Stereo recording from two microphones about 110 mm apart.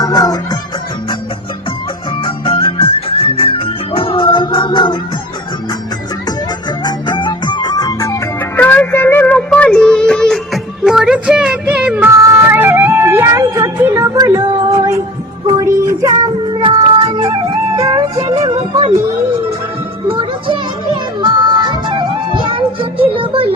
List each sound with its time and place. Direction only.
0.0 s music: 35° left (ahead or behind)
2.2 s music: 50° left (ahead or behind)
6.8 s music: 45° left (ahead or behind)
8.4 s music: 15° left (ahead or behind); by 14.9 s 35° right (ahead or behind)
15.5 s child singing: 25° right (ahead or behind)
16.5 s a sound: 45° right (ahead or behind)
17.2 s music: 35° right (ahead or behind)
20.1 s music: 50° right (ahead or behind)